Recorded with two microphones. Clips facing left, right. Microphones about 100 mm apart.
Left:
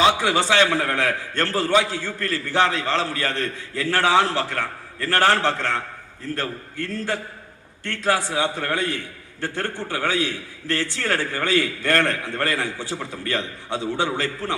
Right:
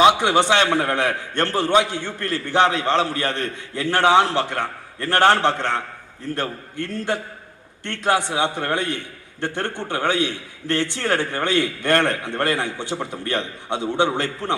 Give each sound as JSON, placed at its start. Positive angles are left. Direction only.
{"t": 0.0, "sound": "a man's voice", "side_deg": -20}